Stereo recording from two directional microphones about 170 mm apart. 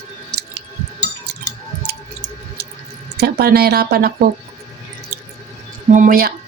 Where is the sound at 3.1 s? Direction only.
65° right (ahead or behind).